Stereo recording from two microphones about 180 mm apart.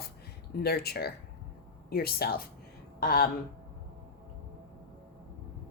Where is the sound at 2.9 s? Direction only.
55° left (ahead or behind).